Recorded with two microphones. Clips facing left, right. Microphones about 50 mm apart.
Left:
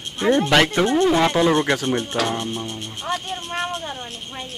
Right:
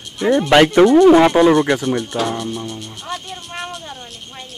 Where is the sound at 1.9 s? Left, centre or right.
Left.